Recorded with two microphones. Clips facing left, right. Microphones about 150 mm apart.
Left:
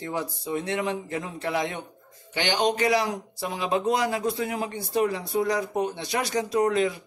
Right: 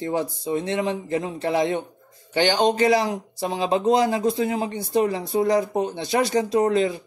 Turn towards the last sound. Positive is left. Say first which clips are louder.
# right 3 dB
turn(degrees=-30)  # may be behind; listen again after turning